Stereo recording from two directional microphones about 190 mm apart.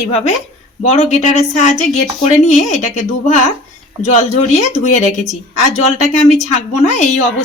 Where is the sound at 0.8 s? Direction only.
35° left (ahead or behind).